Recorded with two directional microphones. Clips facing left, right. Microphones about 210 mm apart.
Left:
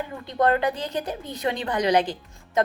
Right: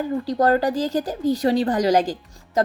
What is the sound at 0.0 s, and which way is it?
A woman's voice, 40° right (ahead or behind).